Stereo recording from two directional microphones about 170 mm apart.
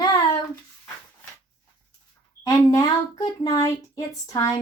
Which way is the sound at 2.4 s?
25° left (ahead or behind).